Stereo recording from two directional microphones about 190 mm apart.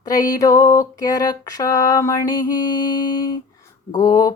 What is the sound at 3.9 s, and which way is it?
Speech, 20° left (ahead or behind).